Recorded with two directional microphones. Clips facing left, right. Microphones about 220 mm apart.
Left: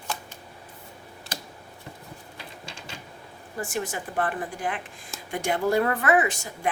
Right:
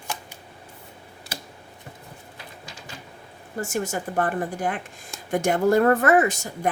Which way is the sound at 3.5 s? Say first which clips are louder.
Right 3 dB; 40° right (ahead or behind).